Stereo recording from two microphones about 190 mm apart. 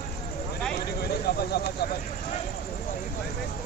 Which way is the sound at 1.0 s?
55° left (ahead or behind).